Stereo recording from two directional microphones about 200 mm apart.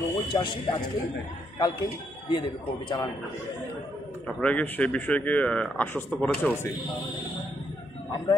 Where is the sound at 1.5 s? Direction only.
20° left (ahead or behind).